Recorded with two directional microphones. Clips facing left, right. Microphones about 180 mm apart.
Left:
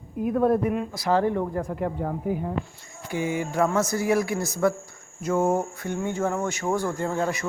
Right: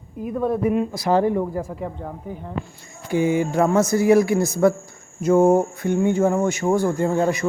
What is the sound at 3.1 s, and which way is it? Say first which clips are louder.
Speech: right 7 dB; 30° right (ahead or behind).